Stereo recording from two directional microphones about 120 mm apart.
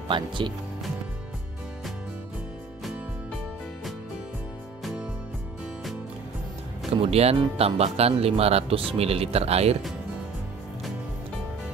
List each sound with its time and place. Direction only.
0.1 s speech: 40° right (ahead or behind)
7.0 s speech: 60° right (ahead or behind)